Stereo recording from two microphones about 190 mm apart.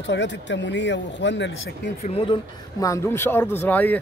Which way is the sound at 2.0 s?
35° left (ahead or behind).